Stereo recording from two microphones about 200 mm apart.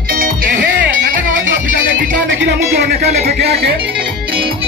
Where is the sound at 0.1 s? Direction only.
45° right (ahead or behind).